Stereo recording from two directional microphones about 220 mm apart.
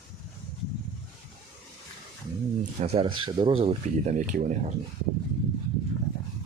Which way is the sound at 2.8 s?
25° right (ahead or behind).